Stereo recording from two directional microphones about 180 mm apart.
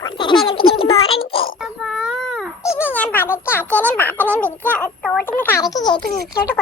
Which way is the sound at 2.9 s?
10° left (ahead or behind).